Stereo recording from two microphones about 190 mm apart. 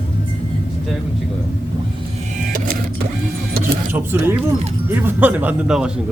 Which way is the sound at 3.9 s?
10° right (ahead or behind).